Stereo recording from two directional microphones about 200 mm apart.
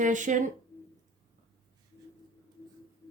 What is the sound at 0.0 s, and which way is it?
Speech, 40° right (ahead or behind).